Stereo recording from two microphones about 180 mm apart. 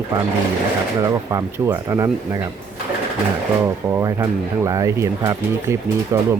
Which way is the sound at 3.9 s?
20° right (ahead or behind).